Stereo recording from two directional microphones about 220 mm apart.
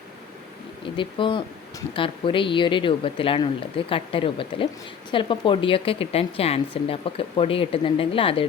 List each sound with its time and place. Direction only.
0.9 s speech: 20° left (ahead or behind)